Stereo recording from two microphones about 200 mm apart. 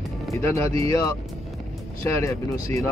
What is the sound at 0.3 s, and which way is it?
Speech, 15° left (ahead or behind).